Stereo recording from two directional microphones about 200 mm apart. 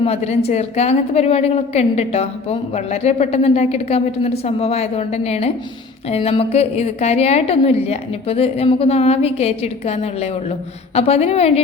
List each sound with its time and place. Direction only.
0.0 s a woman's voice: 30° left (ahead or behind)